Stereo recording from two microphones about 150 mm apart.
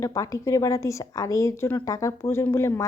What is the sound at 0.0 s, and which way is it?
Speech, 20° left (ahead or behind).